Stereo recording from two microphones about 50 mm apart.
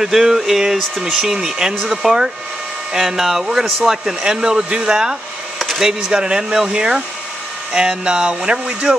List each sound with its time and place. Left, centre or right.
0.0 s speech: centre
0.7 s speech: centre
1.1 s speech: centre